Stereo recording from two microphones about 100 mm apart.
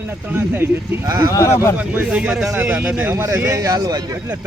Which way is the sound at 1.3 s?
30° left (ahead or behind).